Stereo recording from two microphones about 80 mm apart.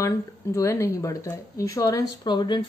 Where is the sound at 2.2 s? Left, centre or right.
Left.